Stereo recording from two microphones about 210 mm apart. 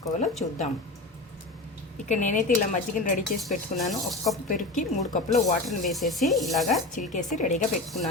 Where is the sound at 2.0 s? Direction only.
35° left (ahead or behind).